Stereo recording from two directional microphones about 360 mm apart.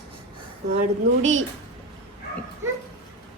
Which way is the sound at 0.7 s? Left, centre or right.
Right.